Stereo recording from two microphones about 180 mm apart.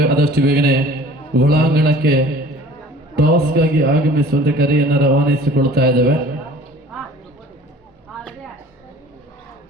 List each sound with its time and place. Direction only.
0.0 s a man's voice: 60° right (ahead or behind)